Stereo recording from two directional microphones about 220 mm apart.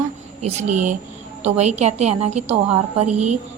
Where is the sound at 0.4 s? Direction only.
35° right (ahead or behind).